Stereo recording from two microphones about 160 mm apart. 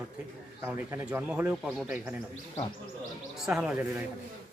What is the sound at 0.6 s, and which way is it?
Speech, 15° right (ahead or behind).